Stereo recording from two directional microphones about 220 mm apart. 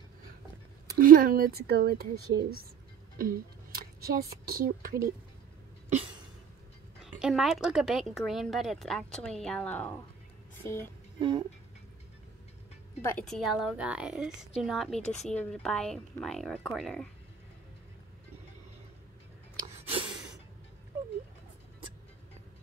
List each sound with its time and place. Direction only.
0.9 s speech: 40° right (ahead or behind)
7.2 s a woman's voice: centre (ahead or behind)
10.6 s music: 10° left (ahead or behind)
11.1 s speech: 20° right (ahead or behind)
13.0 s a woman's voice: 5° left (ahead or behind)
19.6 s a sound: 30° right (ahead or behind)